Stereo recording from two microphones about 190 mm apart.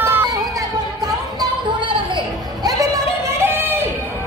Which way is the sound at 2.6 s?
15° right (ahead or behind).